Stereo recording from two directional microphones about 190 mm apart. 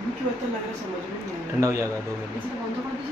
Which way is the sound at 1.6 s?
15° right (ahead or behind).